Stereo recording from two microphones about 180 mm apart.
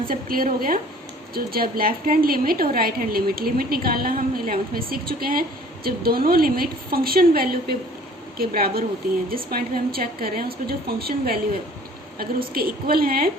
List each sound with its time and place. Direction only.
0.0 s a woman's voice: 55° right (ahead or behind)